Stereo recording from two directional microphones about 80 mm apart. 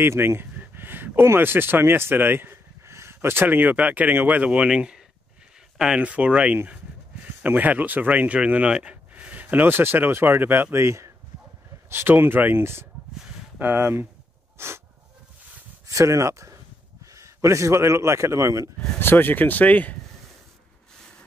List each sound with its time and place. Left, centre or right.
0.0 s speech: right
14.6 s snort: right
15.9 s a man's voice: right
18.9 s speech: left